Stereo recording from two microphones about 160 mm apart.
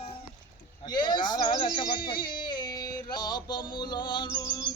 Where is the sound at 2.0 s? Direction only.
65° left (ahead or behind).